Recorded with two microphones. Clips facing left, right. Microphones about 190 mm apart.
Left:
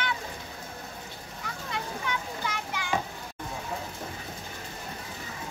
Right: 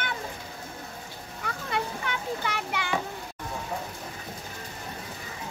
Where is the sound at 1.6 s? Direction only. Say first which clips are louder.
Right 3 dB; 60° right (ahead or behind).